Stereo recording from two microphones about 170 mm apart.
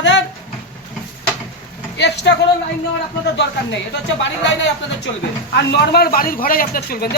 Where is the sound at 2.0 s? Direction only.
90° left.